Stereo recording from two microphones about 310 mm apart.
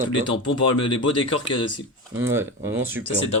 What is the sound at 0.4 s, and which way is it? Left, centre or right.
Speech, centre.